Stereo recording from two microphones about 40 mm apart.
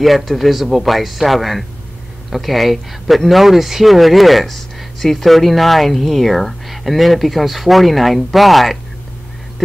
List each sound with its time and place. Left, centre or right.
0.0 s speech: centre